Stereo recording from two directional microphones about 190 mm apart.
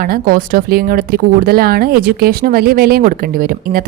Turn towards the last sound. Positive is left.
turn(degrees=-50)  # may be behind; listen again after turning